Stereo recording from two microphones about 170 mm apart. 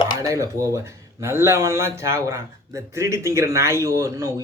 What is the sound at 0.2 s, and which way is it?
Speech, 20° right (ahead or behind).